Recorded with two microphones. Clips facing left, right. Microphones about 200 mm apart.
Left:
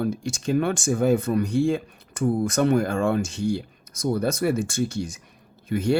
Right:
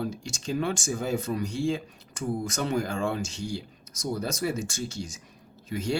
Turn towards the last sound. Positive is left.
turn(degrees=60)  # may be behind; listen again after turning